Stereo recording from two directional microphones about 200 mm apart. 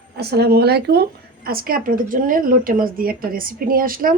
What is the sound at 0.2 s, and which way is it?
Speech, 55° right (ahead or behind).